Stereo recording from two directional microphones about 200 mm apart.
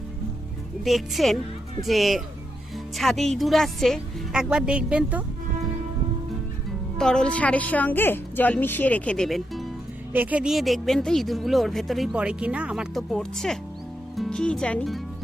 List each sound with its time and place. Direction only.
0.9 s speech: centre (ahead or behind)
6.7 s a woman's voice: 5° left (ahead or behind)